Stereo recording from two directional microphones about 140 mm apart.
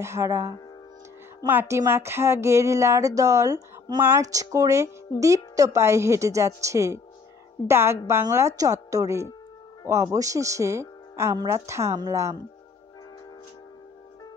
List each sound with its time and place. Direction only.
0.0 s a woman's voice: 20° right (ahead or behind)